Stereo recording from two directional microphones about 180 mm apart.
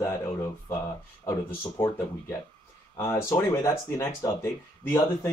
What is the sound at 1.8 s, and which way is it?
Speech, 10° left (ahead or behind).